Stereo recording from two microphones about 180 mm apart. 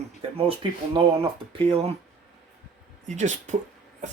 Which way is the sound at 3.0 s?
40° right (ahead or behind).